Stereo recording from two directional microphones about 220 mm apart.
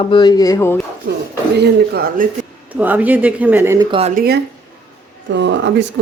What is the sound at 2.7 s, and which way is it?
A woman's voice, 10° right (ahead or behind).